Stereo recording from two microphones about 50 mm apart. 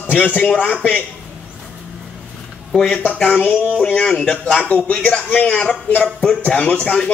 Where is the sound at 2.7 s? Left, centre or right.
Left.